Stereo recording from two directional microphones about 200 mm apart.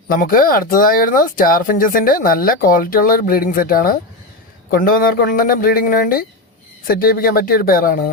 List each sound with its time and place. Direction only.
0.2 s speech: 45° left (ahead or behind)